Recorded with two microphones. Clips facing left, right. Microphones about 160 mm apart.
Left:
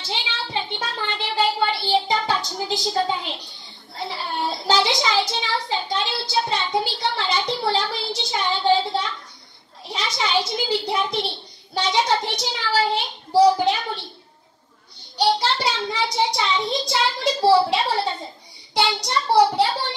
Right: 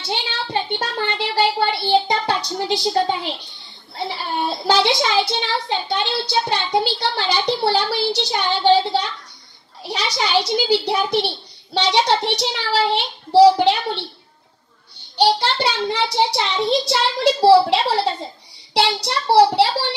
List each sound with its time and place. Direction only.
0.1 s a sound: 65° right (ahead or behind)
1.9 s child singing: 75° right (ahead or behind)
4.1 s a child's voice: 70° right (ahead or behind)
15.1 s a child's voice: 70° right (ahead or behind)